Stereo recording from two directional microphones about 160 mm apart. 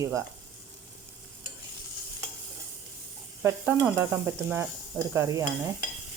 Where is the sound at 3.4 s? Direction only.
15° right (ahead or behind).